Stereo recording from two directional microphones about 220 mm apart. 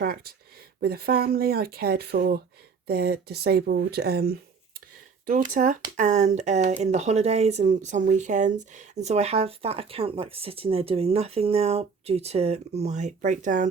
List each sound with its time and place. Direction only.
0.0 s speech: 45° right (ahead or behind)